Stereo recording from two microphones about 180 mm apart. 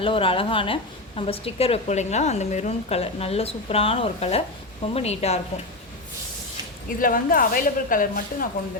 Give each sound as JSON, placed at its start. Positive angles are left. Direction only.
{"t": 0.0, "sound": "a woman's voice", "side_deg": 30}
{"t": 7.0, "sound": "speech", "side_deg": 50}